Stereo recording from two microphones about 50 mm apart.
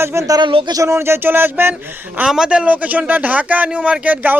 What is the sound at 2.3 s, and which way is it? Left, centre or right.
Speech, centre.